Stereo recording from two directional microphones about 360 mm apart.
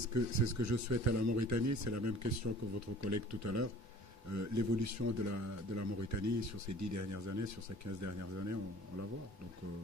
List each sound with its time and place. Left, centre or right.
0.1 s speech: right